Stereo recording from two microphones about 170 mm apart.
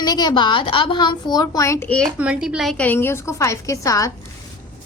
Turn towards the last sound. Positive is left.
turn(degrees=20)  # may be behind; listen again after turning